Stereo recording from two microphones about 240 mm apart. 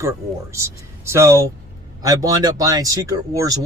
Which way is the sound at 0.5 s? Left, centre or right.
Centre.